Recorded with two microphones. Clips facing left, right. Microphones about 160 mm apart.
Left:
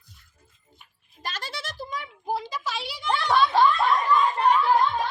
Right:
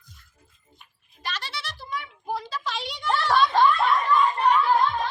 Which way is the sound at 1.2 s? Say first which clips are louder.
Even; 45° left (ahead or behind).